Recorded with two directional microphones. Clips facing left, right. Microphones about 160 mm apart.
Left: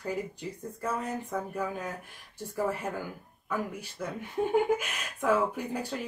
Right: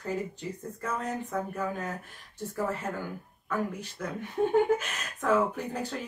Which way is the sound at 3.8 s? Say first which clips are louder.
Right 1 dB; 10° left (ahead or behind).